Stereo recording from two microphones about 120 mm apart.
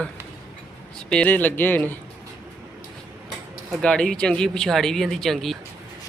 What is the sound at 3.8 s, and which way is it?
Speech, 5° left (ahead or behind).